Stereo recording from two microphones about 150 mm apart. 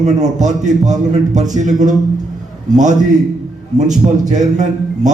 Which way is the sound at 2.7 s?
55° right (ahead or behind).